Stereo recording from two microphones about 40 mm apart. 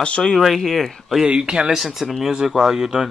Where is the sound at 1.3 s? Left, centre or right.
Centre.